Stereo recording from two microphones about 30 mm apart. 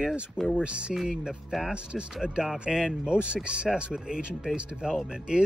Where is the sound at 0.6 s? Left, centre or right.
Right.